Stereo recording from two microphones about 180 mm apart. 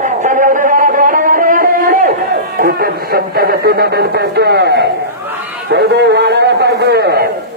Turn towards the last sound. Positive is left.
turn(degrees=-65)  # may be behind; listen again after turning